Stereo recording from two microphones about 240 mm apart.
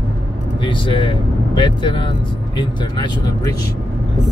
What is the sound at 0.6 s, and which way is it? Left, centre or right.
Speech, left.